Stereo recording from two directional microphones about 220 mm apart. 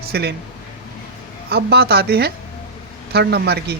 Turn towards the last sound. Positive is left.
turn(degrees=-45)  # may be behind; listen again after turning